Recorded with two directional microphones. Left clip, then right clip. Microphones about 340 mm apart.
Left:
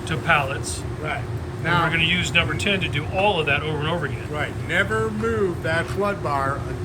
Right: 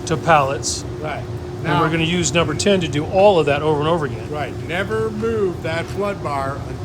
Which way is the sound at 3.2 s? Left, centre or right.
Right.